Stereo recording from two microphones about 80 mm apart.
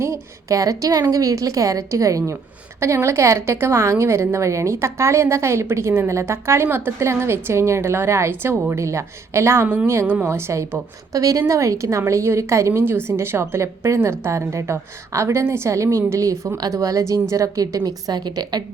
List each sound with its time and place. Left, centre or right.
0.0 s a woman's voice: right